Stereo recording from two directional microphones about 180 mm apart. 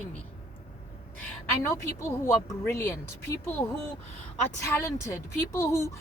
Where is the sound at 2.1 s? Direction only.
15° left (ahead or behind).